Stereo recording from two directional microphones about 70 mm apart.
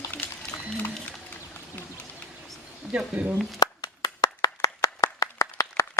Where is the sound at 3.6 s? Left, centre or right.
Left.